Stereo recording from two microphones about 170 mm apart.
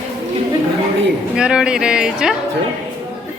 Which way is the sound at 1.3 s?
5° right (ahead or behind).